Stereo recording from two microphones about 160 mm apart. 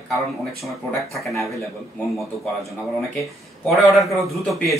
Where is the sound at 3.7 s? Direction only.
Centre (ahead or behind).